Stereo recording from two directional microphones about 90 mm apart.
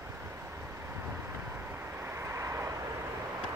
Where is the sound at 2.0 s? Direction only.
30° right (ahead or behind).